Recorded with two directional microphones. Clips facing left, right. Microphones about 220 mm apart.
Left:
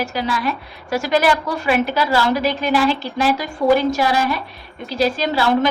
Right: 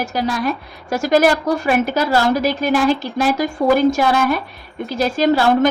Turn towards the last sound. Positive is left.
turn(degrees=-45)  # may be behind; listen again after turning